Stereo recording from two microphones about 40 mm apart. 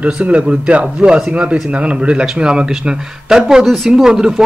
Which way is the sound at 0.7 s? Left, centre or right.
Right.